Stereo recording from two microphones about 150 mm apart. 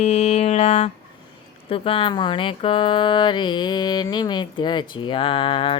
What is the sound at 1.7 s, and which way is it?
Music, 35° left (ahead or behind).